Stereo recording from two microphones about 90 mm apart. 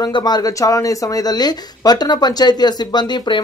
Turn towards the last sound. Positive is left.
turn(degrees=55)  # may be behind; listen again after turning